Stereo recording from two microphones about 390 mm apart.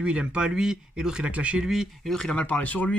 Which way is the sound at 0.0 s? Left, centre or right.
Centre.